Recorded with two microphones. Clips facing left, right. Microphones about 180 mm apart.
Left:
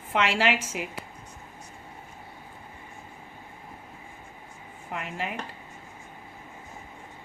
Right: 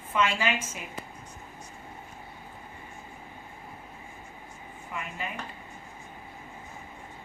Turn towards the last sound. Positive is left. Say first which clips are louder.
# left 3 dB
turn(degrees=70)  # may be behind; listen again after turning